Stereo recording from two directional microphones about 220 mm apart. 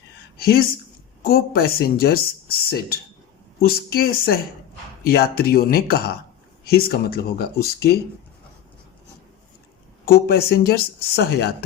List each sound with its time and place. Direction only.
0.3 s speech: 45° left (ahead or behind)
10.1 s speech: 45° left (ahead or behind)